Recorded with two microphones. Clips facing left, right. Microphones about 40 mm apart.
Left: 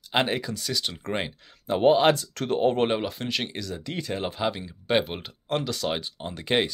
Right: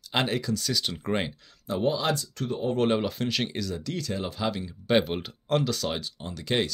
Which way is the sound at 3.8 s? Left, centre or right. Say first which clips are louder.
Left 1 dB; left.